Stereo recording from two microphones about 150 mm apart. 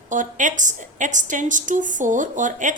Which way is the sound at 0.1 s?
60° right (ahead or behind).